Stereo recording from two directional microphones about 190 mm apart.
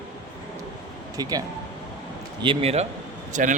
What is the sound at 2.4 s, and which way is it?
Speech, 30° right (ahead or behind).